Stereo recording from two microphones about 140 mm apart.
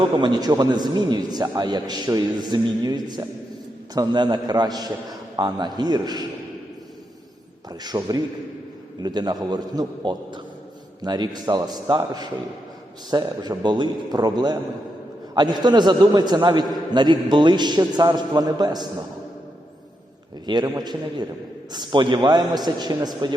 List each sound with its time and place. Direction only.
0.0 s a man's voice: 30° right (ahead or behind)
7.7 s a man's voice: 30° right (ahead or behind)
20.5 s a man's voice: 30° right (ahead or behind)